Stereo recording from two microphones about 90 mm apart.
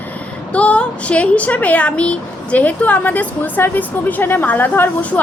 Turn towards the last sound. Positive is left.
turn(degrees=20)  # may be behind; listen again after turning